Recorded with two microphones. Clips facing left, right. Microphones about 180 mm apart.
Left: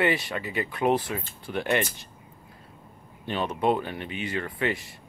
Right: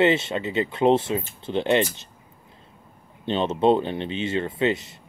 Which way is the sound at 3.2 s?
25° right (ahead or behind).